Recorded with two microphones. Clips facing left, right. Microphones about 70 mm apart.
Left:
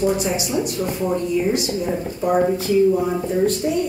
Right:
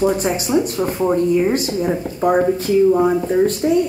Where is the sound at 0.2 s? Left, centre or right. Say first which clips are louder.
Right 4 dB; right.